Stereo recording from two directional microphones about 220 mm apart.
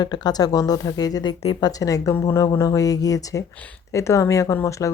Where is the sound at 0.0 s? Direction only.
20° left (ahead or behind).